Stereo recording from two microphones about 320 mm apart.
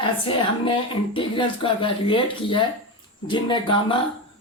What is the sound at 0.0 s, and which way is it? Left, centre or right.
Speech, centre.